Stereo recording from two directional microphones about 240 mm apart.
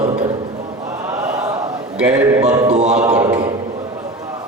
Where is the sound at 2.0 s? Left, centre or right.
Centre.